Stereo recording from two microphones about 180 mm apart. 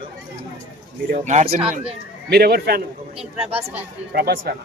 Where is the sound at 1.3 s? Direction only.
35° right (ahead or behind).